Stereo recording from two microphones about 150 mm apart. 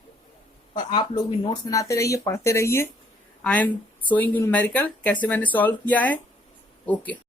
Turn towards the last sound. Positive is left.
turn(degrees=10)  # may be behind; listen again after turning